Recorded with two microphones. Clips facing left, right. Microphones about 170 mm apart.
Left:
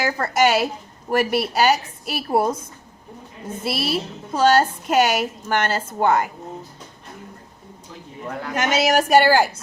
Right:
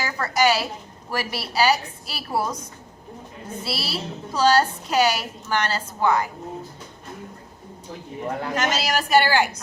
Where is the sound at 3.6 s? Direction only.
55° left (ahead or behind).